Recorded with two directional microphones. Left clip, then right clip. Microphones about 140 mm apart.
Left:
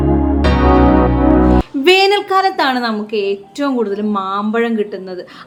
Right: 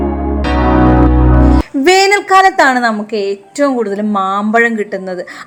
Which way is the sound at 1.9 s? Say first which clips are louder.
Right 3 dB; 55° right (ahead or behind).